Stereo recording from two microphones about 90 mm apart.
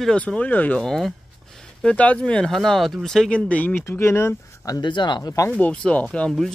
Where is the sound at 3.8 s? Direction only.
30° left (ahead or behind).